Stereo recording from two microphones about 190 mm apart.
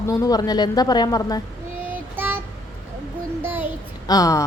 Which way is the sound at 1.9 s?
10° right (ahead or behind).